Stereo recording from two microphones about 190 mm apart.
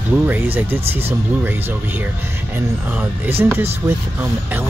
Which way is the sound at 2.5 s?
10° right (ahead or behind).